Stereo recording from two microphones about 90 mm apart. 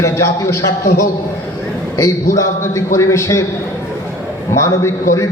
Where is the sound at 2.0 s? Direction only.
35° left (ahead or behind).